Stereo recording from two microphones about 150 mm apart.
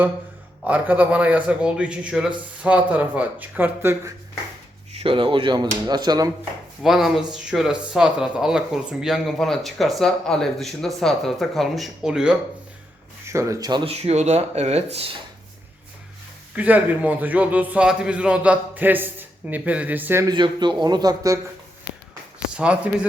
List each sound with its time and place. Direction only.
0.6 s a man's voice: 10° right (ahead or behind)
4.9 s speech: 40° right (ahead or behind)
6.8 s speech: centre (ahead or behind)
13.2 s a man's voice: 20° right (ahead or behind)
14.0 s speech: 45° right (ahead or behind)
16.6 s a man's voice: 10° right (ahead or behind)
20.2 s a man's voice: 30° right (ahead or behind)
22.5 s a man's voice: 10° right (ahead or behind)